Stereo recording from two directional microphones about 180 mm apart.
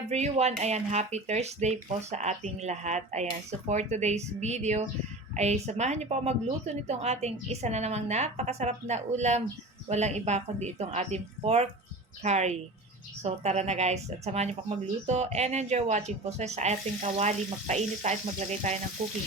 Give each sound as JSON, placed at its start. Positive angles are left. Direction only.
{"t": 0.1, "sound": "speech", "side_deg": -35}